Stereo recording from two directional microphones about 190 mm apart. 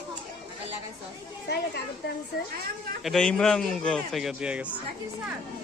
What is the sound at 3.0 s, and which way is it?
A man's voice, centre (ahead or behind).